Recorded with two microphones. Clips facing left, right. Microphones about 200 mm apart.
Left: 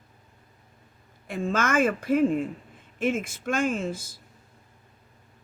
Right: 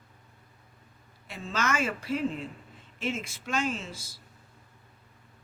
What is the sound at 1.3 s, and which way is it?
Speech, 50° left (ahead or behind).